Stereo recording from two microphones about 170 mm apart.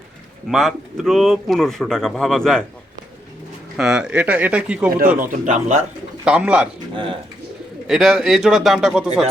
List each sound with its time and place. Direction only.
0.4 s speech: centre (ahead or behind)
3.8 s speech: 5° right (ahead or behind)
5.2 s speech: 50° right (ahead or behind)
6.2 s speech: 5° right (ahead or behind)
6.9 s speech: 30° right (ahead or behind)
7.9 s speech: centre (ahead or behind)